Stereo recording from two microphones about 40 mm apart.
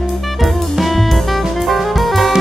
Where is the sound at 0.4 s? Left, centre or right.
Centre.